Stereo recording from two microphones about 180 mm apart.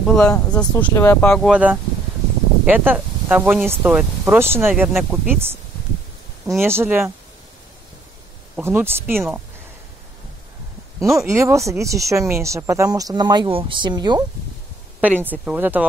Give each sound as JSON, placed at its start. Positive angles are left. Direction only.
{"t": 0.0, "sound": "speech", "side_deg": 0}
{"t": 1.5, "sound": "speech", "side_deg": -5}
{"t": 6.6, "sound": "speech", "side_deg": -15}
{"t": 8.5, "sound": "speech", "side_deg": -10}
{"t": 11.0, "sound": "speech", "side_deg": -15}
{"t": 15.0, "sound": "speech", "side_deg": -10}